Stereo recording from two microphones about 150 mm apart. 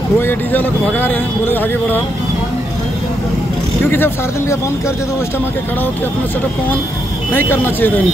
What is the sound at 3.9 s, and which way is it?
Speech, 15° left (ahead or behind).